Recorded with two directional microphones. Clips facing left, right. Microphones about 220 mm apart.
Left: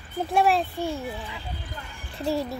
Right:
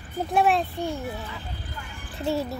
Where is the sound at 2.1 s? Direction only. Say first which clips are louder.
Even; centre (ahead or behind).